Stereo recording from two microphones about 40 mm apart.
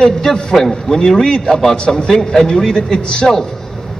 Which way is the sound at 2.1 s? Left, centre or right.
Centre.